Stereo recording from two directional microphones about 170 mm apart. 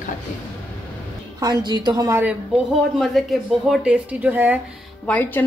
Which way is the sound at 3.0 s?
Centre (ahead or behind).